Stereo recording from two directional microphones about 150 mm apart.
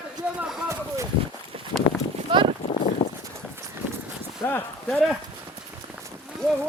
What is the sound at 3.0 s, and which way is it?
Clip-clop, 35° left (ahead or behind).